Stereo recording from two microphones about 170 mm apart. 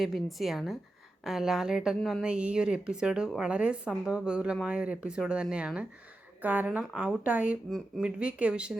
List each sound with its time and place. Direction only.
0.0 s a woman's voice: centre (ahead or behind)